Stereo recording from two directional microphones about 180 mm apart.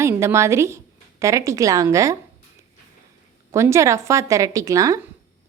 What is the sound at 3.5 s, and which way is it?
A woman's voice, 15° right (ahead or behind).